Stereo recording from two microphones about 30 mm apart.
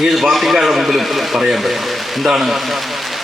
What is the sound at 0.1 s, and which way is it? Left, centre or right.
A man's voice, centre.